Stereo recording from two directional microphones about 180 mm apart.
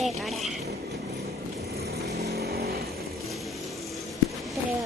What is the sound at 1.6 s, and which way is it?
Vehicle, 60° right (ahead or behind).